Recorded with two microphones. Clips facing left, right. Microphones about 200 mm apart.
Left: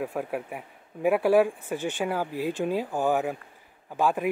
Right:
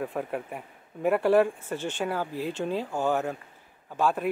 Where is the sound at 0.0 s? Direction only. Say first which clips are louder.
Left 1 dB; 5° left (ahead or behind).